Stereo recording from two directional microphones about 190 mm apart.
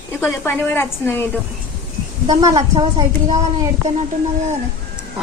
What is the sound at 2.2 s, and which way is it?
Speech, 20° right (ahead or behind).